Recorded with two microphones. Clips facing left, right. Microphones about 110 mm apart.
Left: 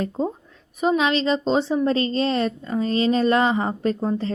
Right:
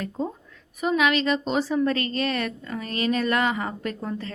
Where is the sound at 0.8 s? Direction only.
25° left (ahead or behind).